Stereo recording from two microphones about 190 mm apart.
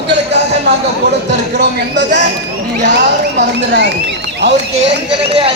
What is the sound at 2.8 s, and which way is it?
Speech, 65° right (ahead or behind).